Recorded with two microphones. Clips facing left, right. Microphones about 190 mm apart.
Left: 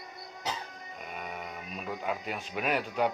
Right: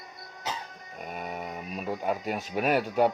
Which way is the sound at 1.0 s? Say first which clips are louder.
Right 5 dB; 45° right (ahead or behind).